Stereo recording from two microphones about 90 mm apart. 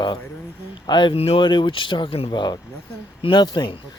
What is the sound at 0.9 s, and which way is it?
Speech, 60° left (ahead or behind).